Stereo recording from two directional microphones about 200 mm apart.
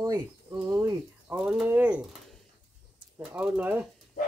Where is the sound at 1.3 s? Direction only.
Centre (ahead or behind).